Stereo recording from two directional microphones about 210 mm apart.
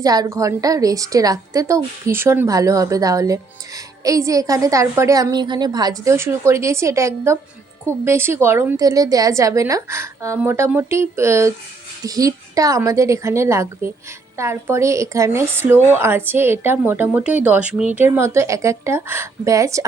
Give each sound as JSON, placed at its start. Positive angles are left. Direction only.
{"t": 0.0, "sound": "a woman's voice", "side_deg": -20}